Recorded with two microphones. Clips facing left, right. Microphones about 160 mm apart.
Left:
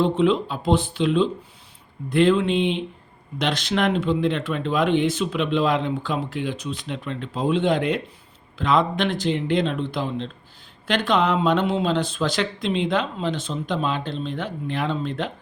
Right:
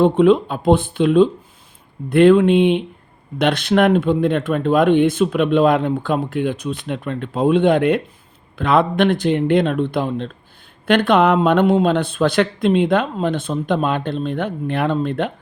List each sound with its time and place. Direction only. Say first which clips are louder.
0.0 s speech: right 7 dB; 55° right (ahead or behind)